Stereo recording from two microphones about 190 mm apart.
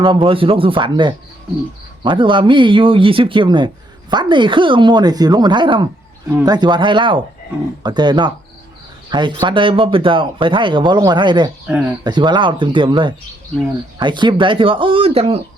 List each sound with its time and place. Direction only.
0.0 s speech: 25° right (ahead or behind)